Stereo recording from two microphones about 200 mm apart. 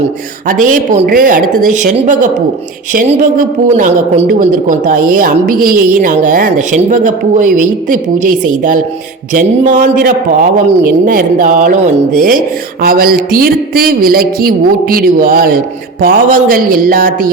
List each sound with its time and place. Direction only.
0.0 s a woman's voice: 40° right (ahead or behind)